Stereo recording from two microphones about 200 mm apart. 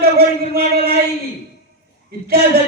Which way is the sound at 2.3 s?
50° right (ahead or behind).